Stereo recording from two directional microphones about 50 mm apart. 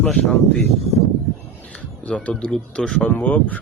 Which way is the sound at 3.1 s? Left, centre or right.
Left.